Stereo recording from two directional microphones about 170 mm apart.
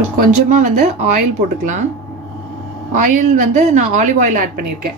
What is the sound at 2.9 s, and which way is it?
A woman's voice, 50° right (ahead or behind).